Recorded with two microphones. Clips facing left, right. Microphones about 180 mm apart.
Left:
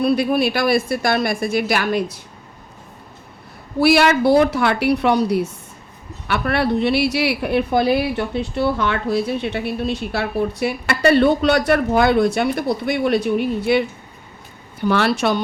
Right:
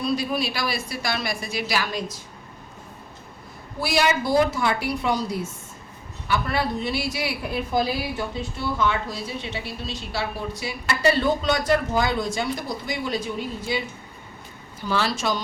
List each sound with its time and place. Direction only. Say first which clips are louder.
0.0 s a woman's voice: left 8 dB; 60° left (ahead or behind)
3.8 s a woman's voice: left 8 dB; 65° left (ahead or behind)